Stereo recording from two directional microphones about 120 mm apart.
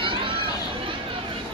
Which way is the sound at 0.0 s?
45° right (ahead or behind).